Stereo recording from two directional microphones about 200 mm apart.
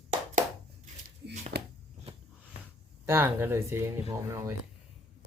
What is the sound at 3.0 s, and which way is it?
Speech, 10° right (ahead or behind).